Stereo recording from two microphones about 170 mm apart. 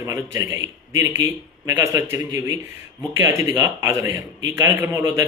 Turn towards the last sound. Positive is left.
turn(degrees=-15)  # may be behind; listen again after turning